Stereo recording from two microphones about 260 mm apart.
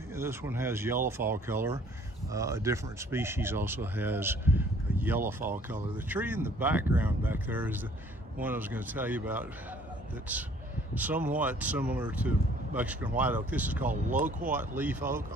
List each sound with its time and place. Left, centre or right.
0.1 s speech: centre
11.0 s speech: centre
13.9 s speech: right
14.8 s speech: centre